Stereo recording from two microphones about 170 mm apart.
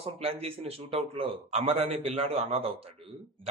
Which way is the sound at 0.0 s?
35° right (ahead or behind).